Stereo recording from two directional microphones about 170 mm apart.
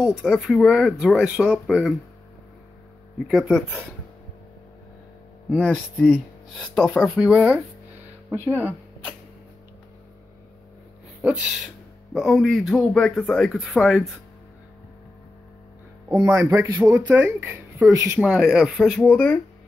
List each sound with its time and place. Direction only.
0.0 s speech: centre (ahead or behind)
3.3 s speech: centre (ahead or behind)
5.5 s speech: centre (ahead or behind)
7.2 s speech: 5° right (ahead or behind)
8.4 s speech: 15° left (ahead or behind)
11.2 s speech: 5° right (ahead or behind)
16.3 s speech: 10° right (ahead or behind)
18.2 s speech: 5° right (ahead or behind)